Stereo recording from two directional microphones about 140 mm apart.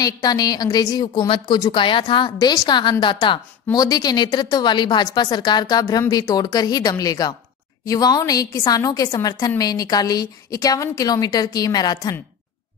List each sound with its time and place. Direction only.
0.0 s a woman's voice: 30° left (ahead or behind)